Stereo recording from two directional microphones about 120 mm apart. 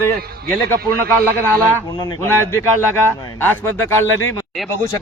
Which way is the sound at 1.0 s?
15° left (ahead or behind).